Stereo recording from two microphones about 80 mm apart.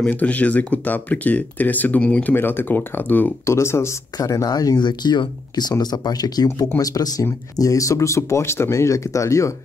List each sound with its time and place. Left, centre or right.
0.0 s speech: centre
2.3 s speech: left
3.4 s speech: left
4.2 s speech: left